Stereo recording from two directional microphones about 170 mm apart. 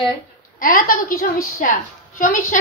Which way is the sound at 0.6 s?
55° left (ahead or behind).